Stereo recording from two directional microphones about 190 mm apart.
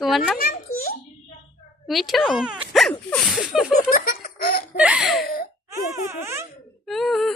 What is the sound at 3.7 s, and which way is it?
Giggle, 45° left (ahead or behind).